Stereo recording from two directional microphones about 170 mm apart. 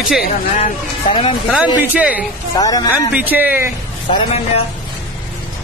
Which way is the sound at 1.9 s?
10° right (ahead or behind).